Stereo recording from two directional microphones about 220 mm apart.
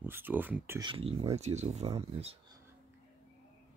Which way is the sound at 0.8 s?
25° right (ahead or behind).